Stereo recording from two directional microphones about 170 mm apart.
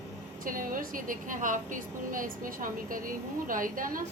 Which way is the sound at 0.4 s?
55° right (ahead or behind).